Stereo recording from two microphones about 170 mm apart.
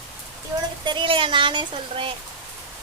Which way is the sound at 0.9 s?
30° right (ahead or behind).